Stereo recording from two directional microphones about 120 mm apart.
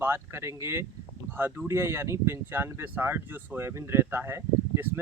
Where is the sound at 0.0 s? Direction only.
20° right (ahead or behind).